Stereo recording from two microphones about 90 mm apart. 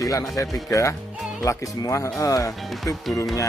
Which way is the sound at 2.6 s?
Centre (ahead or behind).